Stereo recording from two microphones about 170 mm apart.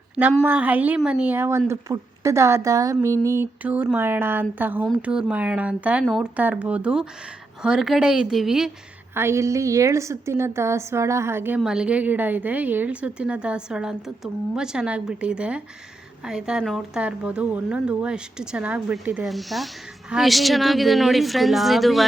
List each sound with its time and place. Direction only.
0.4 s a woman's voice: 10° right (ahead or behind)
9.1 s a woman's voice: 15° right (ahead or behind)